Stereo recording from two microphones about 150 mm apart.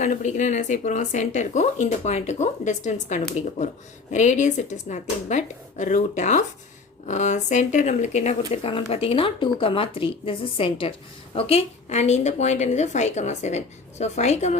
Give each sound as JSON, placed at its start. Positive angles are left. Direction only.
{"t": 0.0, "sound": "a woman's voice", "side_deg": 55}